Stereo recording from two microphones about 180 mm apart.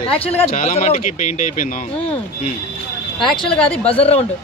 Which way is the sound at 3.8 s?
35° left (ahead or behind).